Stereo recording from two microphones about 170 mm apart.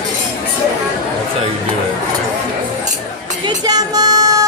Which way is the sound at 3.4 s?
25° right (ahead or behind).